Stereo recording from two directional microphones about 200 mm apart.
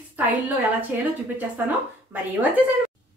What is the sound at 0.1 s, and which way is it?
A woman's voice, 10° right (ahead or behind).